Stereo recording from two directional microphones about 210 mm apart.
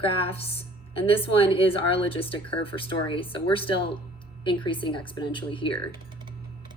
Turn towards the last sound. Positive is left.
turn(degrees=25)  # may be behind; listen again after turning